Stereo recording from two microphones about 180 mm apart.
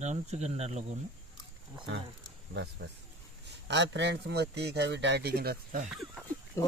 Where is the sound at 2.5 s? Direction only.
70° right (ahead or behind).